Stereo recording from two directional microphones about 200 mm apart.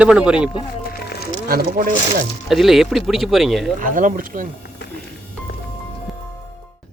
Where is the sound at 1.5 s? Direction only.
45° right (ahead or behind).